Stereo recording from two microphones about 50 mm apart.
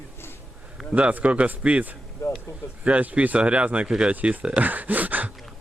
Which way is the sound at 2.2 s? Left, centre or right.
Left.